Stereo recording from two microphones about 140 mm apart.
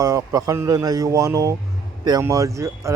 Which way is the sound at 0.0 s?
25° right (ahead or behind).